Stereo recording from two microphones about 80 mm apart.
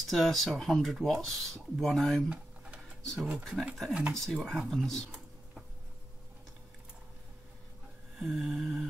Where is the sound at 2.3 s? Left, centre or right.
Centre.